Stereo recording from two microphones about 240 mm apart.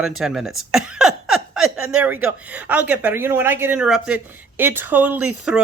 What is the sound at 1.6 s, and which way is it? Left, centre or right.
Speech, right.